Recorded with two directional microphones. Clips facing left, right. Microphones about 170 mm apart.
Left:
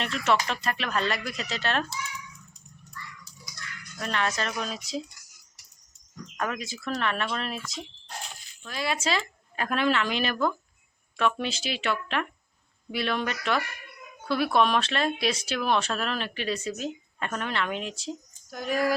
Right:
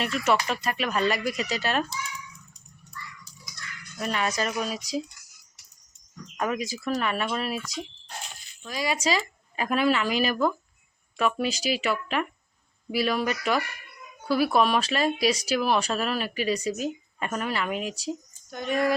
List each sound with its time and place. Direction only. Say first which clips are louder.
0.0 s speech: right 1 dB; 5° right (ahead or behind)
3.9 s speech: right 1 dB; 10° right (ahead or behind)
6.3 s speech: right 4 dB; 10° right (ahead or behind)
8.6 s speech: right 2 dB; 10° right (ahead or behind)